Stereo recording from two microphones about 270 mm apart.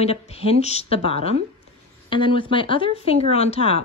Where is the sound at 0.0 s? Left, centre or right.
Left.